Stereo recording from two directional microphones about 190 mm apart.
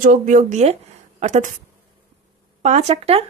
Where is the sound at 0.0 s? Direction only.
45° right (ahead or behind).